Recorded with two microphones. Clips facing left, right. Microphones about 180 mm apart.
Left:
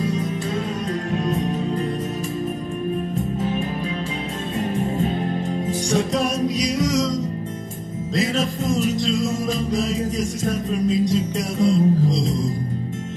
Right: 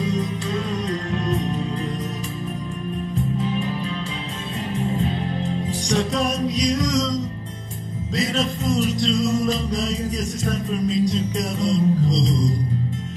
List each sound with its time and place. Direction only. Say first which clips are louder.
3.3 s music: left 1 dB; 45° left (ahead or behind)
5.0 s music: left 2 dB; 50° left (ahead or behind)
5.9 s music: even; 5° left (ahead or behind)
8.1 s music: left 1 dB; 5° left (ahead or behind)